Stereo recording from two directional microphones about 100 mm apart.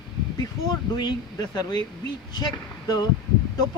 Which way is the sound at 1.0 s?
45° left (ahead or behind).